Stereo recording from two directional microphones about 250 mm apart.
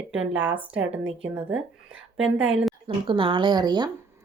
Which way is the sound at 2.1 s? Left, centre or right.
Centre.